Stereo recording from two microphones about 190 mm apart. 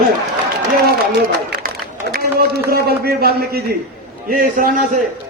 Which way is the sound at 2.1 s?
55° right (ahead or behind).